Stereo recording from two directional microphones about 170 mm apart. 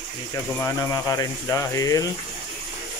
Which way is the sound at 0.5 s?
15° left (ahead or behind).